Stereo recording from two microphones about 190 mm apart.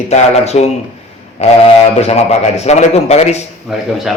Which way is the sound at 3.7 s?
Centre (ahead or behind).